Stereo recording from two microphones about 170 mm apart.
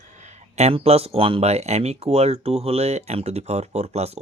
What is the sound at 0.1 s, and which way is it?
Speech, 45° right (ahead or behind).